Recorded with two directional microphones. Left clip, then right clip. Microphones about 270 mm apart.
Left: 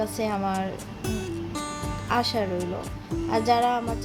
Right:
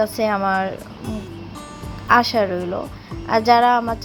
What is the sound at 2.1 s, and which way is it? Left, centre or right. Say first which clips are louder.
Speech: right 10 dB; centre.